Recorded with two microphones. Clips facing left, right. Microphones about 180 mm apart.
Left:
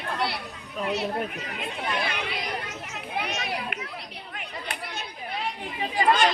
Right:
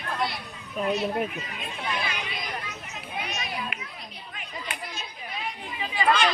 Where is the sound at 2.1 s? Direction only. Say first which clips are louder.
Left 3 dB; 60° left (ahead or behind).